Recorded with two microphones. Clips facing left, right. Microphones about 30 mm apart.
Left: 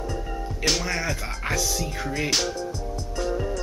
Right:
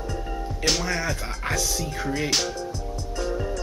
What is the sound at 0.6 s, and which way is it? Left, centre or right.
Speech, centre.